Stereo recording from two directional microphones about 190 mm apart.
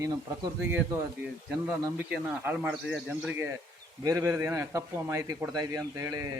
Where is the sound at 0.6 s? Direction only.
10° right (ahead or behind).